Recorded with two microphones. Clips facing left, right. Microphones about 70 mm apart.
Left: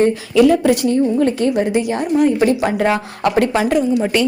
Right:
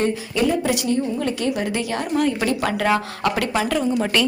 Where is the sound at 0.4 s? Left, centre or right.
Left.